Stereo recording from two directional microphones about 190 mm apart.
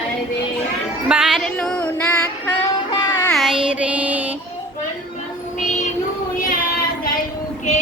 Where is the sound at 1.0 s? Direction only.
5° right (ahead or behind).